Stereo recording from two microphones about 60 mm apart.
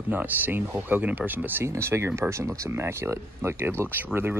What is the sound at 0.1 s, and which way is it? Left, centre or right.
Speech, right.